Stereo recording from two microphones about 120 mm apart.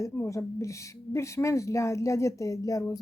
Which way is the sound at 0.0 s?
25° left (ahead or behind).